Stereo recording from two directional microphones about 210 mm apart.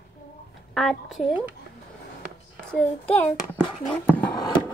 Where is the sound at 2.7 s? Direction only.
5° left (ahead or behind).